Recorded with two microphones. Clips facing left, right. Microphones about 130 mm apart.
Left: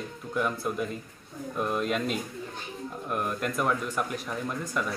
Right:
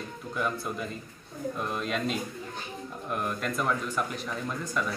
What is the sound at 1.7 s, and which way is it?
A man's voice, 5° left (ahead or behind).